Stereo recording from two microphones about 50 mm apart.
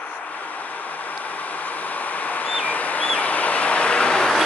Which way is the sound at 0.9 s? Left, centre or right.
Left.